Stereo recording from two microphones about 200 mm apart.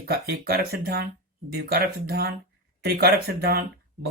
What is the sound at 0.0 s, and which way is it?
Speech, 50° right (ahead or behind).